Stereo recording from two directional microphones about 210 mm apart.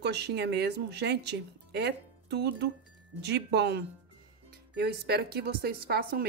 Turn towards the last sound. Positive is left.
turn(degrees=-45)  # may be behind; listen again after turning